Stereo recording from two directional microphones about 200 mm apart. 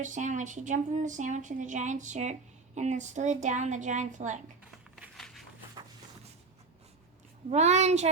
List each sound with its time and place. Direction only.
0.0 s speech: 40° right (ahead or behind)
4.9 s a sound: centre (ahead or behind)
7.5 s speech: 35° right (ahead or behind)